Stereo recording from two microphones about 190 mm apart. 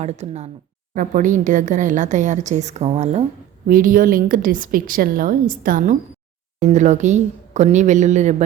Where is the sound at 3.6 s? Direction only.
50° right (ahead or behind).